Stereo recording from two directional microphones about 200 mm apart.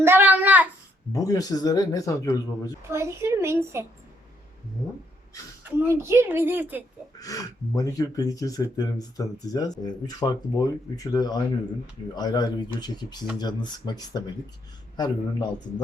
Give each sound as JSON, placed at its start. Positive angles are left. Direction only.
{"t": 0.0, "sound": "child singing", "side_deg": -10}
{"t": 1.1, "sound": "speech", "side_deg": 15}
{"t": 2.9, "sound": "a woman's voice", "side_deg": -15}
{"t": 5.9, "sound": "a woman's voice", "side_deg": -10}
{"t": 7.2, "sound": "speech", "side_deg": 15}